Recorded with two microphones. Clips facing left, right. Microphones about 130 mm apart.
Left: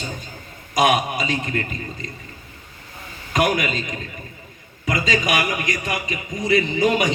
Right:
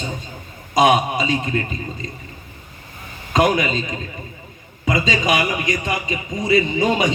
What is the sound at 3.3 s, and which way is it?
A man's voice, 30° right (ahead or behind).